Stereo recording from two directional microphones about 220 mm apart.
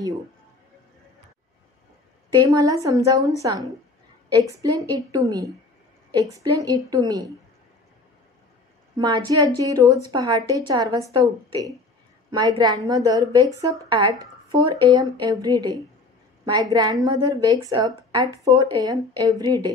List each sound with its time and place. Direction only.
2.3 s a woman's voice: 15° right (ahead or behind)
4.9 s a woman's voice: 15° right (ahead or behind)
8.9 s a woman's voice: 20° right (ahead or behind)